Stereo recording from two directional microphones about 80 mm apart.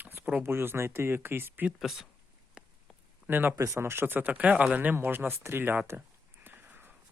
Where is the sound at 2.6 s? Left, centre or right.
Centre.